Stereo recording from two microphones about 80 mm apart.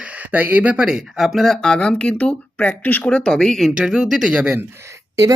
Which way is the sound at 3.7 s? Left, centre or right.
Centre.